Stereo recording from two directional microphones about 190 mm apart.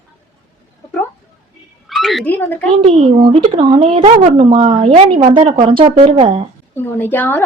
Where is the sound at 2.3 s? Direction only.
10° left (ahead or behind).